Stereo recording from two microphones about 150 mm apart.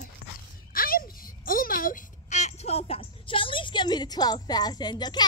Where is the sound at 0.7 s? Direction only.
75° left (ahead or behind).